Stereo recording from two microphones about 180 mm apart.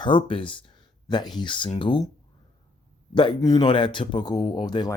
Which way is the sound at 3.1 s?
25° left (ahead or behind).